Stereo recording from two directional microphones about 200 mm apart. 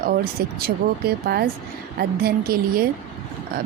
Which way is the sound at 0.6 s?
50° right (ahead or behind).